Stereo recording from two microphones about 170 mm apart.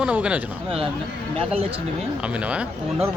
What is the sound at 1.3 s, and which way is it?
Speech, 35° right (ahead or behind).